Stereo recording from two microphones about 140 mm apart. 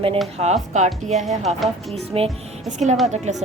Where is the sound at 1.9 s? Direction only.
45° right (ahead or behind).